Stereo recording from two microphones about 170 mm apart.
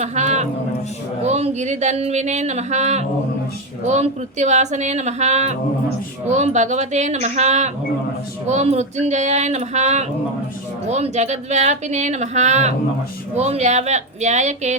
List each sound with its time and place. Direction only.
0.0 s a man's voice: 45° right (ahead or behind)